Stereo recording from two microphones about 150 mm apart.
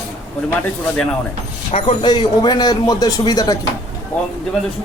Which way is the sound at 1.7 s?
40° left (ahead or behind).